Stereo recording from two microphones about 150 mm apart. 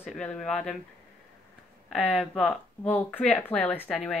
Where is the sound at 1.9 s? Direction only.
10° left (ahead or behind).